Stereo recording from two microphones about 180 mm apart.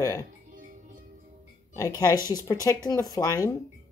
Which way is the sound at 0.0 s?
15° left (ahead or behind).